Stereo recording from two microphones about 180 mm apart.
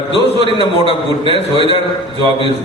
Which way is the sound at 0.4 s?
30° left (ahead or behind).